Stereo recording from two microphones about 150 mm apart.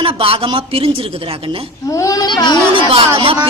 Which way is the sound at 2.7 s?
35° right (ahead or behind).